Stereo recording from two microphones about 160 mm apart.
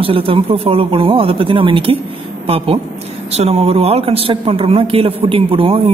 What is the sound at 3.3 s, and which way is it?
Speech, 40° right (ahead or behind).